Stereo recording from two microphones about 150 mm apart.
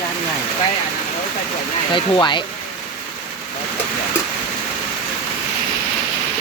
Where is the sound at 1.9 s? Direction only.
30° left (ahead or behind).